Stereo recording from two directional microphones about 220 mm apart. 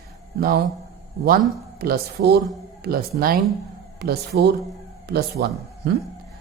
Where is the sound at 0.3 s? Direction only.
45° right (ahead or behind).